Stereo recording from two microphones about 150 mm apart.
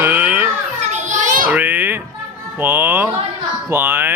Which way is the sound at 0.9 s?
55° right (ahead or behind).